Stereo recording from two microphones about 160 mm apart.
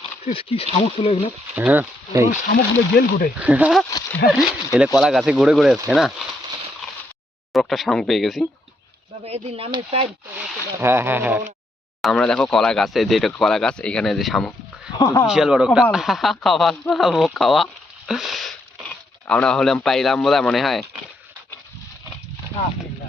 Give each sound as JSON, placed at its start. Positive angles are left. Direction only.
{"t": 0.3, "sound": "speech", "side_deg": 35}
{"t": 1.5, "sound": "speech", "side_deg": -10}
{"t": 2.2, "sound": "speech", "side_deg": 50}
{"t": 2.9, "sound": "speech", "side_deg": 70}
{"t": 3.3, "sound": "speech", "side_deg": -10}
{"t": 7.5, "sound": "speech", "side_deg": 0}
{"t": 9.2, "sound": "speech", "side_deg": -40}
{"t": 10.8, "sound": "speech", "side_deg": -15}
{"t": 12.0, "sound": "speech", "side_deg": 5}
{"t": 14.9, "sound": "speech", "side_deg": 20}
{"t": 15.3, "sound": "speech", "side_deg": -5}